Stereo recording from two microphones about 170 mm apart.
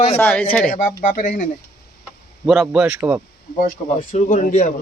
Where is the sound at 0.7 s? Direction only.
55° left (ahead or behind).